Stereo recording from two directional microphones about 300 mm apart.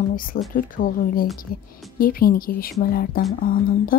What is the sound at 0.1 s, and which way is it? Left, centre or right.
Speech, left.